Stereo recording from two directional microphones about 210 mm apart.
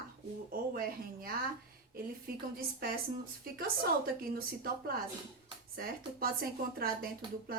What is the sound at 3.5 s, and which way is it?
Speech, 45° right (ahead or behind).